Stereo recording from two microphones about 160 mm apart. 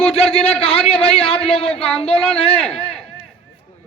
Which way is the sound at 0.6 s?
40° left (ahead or behind).